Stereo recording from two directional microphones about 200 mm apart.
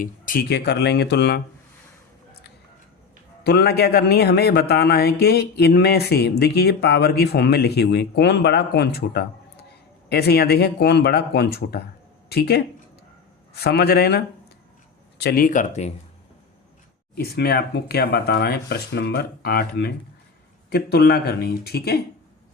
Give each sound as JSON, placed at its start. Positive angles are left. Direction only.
{"t": 0.0, "sound": "speech", "side_deg": 45}
{"t": 3.4, "sound": "speech", "side_deg": 55}
{"t": 17.2, "sound": "speech", "side_deg": 50}